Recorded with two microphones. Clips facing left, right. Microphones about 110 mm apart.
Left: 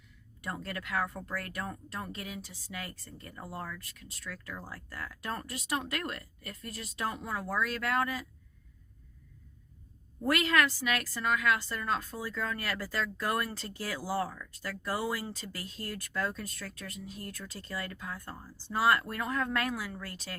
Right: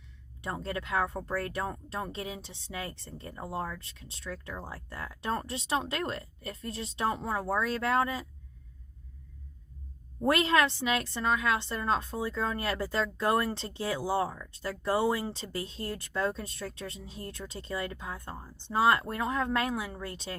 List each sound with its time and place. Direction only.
0.4 s a woman's voice: 25° right (ahead or behind)
10.2 s a woman's voice: 30° right (ahead or behind)